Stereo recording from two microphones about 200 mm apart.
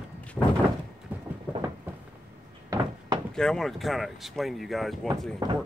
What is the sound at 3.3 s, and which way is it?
Speech, centre (ahead or behind).